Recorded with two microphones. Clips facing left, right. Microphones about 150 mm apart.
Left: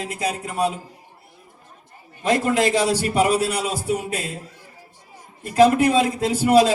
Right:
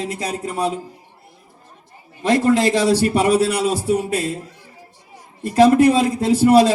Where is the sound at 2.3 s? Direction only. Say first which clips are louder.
Right 3 dB; 35° right (ahead or behind).